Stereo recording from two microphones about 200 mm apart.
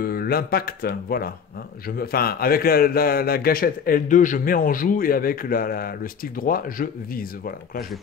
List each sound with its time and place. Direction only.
0.0 s a man's voice: 50° left (ahead or behind)